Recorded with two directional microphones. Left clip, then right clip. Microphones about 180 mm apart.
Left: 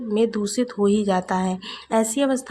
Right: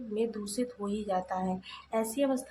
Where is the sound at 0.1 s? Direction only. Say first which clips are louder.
Left 11 dB; 40° left (ahead or behind).